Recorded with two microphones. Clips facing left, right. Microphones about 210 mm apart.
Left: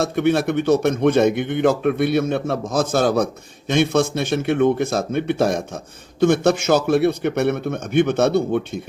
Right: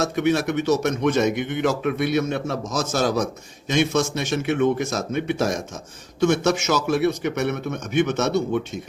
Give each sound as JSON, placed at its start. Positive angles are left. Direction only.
{"t": 0.0, "sound": "a man's voice", "side_deg": 55}